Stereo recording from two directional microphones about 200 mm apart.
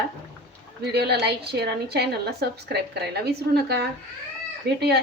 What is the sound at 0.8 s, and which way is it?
A woman's voice, 55° right (ahead or behind).